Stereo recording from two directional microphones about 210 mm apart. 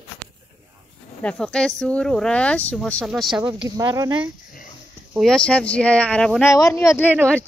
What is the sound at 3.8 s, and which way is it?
Speech, 15° right (ahead or behind).